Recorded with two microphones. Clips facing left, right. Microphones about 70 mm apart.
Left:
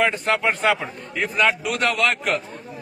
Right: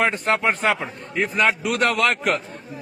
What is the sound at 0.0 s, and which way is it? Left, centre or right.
A man's voice, right.